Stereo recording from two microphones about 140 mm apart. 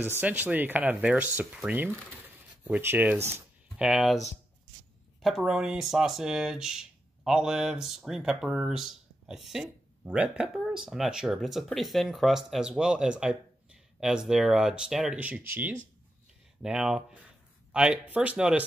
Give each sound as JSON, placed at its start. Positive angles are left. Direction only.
{"t": 0.2, "sound": "speech", "side_deg": -10}
{"t": 5.2, "sound": "speech", "side_deg": 0}